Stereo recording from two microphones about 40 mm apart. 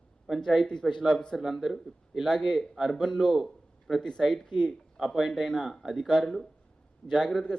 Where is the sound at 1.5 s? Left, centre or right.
Centre.